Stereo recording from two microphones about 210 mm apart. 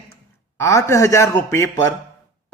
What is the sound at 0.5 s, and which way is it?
Speech, 15° left (ahead or behind).